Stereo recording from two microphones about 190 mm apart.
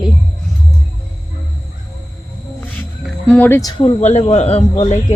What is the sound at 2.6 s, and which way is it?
Music, 5° left (ahead or behind).